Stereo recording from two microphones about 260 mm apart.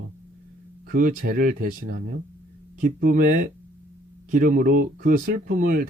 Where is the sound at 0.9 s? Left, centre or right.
Right.